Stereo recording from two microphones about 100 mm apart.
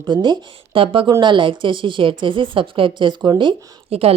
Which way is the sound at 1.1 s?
50° right (ahead or behind).